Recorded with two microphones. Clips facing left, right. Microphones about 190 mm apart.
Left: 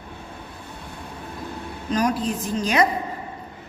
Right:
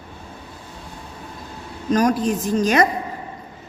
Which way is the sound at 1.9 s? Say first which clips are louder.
Right 5 dB; 45° right (ahead or behind).